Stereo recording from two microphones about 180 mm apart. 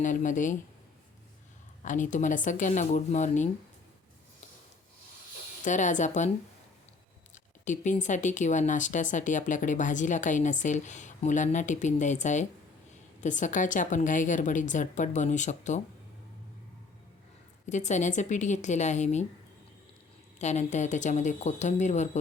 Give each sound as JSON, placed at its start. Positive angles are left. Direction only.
{"t": 0.0, "sound": "speech", "side_deg": 45}
{"t": 1.8, "sound": "speech", "side_deg": 45}
{"t": 5.6, "sound": "speech", "side_deg": 45}
{"t": 7.3, "sound": "speech", "side_deg": 45}
{"t": 17.7, "sound": "speech", "side_deg": 40}
{"t": 20.4, "sound": "speech", "side_deg": 40}